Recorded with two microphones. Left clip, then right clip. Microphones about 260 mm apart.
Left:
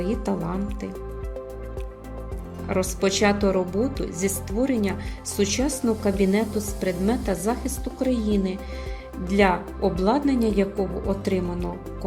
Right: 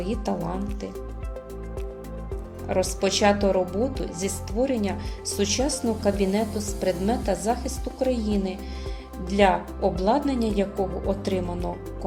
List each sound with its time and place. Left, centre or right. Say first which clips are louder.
0.0 s a woman's voice: left 2 dB; left
2.6 s a woman's voice: even; left